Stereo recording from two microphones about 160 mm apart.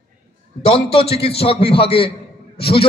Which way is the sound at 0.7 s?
35° left (ahead or behind).